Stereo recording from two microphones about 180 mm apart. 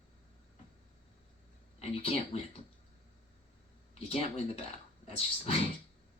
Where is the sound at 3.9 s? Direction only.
35° left (ahead or behind).